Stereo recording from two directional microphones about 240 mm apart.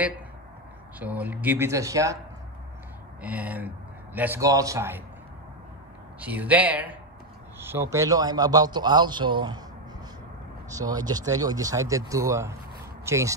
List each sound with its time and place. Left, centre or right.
0.9 s a man's voice: centre
3.2 s speech: centre
6.2 s a man's voice: centre
10.7 s a man's voice: centre